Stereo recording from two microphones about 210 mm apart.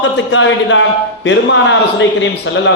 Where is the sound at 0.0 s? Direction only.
65° left (ahead or behind).